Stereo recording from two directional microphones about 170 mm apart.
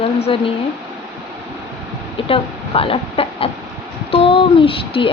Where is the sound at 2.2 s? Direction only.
30° left (ahead or behind).